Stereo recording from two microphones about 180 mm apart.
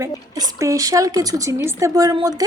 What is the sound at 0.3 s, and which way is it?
A woman's voice, 15° right (ahead or behind).